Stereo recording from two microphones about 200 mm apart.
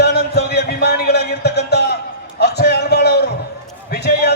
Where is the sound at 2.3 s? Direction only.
55° left (ahead or behind).